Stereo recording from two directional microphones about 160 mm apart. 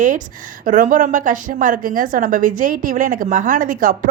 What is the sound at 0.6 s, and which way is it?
Speech, 55° right (ahead or behind).